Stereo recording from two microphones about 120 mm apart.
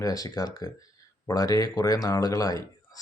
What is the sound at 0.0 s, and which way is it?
A man's voice, 30° left (ahead or behind).